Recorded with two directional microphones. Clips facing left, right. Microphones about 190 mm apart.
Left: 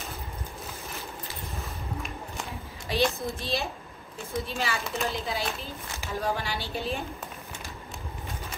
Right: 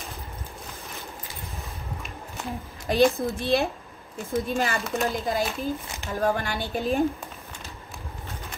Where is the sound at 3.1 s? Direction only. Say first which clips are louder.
Right 7 dB; 55° right (ahead or behind).